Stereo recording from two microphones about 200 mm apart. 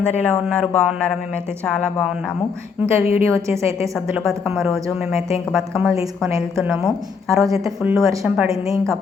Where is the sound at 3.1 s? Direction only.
30° left (ahead or behind).